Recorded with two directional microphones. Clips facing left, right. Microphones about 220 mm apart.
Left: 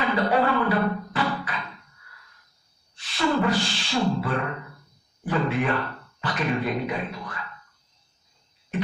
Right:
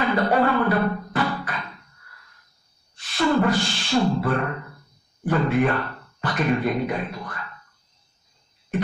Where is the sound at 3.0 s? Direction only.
45° right (ahead or behind).